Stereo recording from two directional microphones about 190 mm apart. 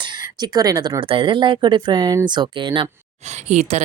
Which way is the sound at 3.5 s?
35° right (ahead or behind).